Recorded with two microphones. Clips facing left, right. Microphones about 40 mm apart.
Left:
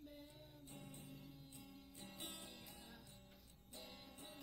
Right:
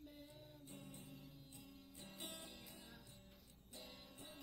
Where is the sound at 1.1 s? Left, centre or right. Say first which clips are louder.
Left 1 dB; centre.